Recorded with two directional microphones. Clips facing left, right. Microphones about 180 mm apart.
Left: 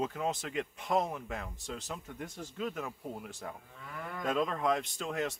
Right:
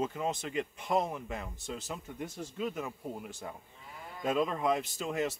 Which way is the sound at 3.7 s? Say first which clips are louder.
Left 5 dB; 70° left (ahead or behind).